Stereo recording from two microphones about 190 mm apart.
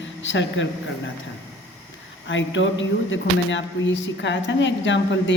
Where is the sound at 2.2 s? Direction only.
80° left.